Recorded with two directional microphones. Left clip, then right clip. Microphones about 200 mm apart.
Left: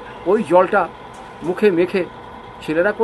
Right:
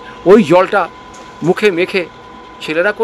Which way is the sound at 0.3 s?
50° right (ahead or behind).